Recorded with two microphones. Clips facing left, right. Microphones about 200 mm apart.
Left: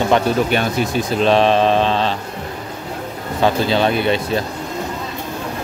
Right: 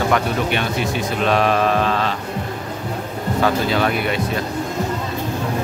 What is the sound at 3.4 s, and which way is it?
Mantra, 25° left (ahead or behind).